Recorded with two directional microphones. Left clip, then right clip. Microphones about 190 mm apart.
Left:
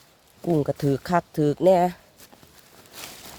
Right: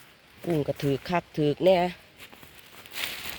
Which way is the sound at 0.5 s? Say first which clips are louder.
Left 4 dB; 35° left (ahead or behind).